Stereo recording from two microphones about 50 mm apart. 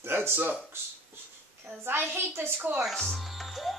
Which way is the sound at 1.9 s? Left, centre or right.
Right.